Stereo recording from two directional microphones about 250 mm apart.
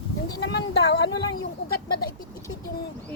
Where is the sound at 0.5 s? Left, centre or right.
Left.